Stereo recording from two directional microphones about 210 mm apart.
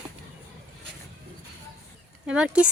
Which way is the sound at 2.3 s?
5° right (ahead or behind).